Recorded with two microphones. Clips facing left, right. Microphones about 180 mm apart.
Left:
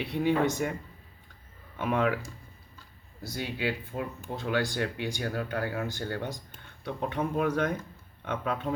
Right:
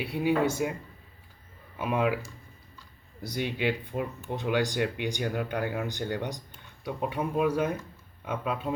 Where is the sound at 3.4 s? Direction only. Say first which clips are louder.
Right 3 dB; 20° right (ahead or behind).